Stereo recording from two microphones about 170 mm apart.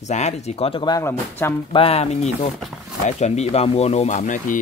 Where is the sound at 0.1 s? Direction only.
40° left (ahead or behind).